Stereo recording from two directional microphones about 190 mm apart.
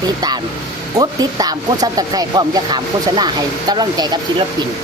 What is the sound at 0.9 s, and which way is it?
Speech, 20° right (ahead or behind).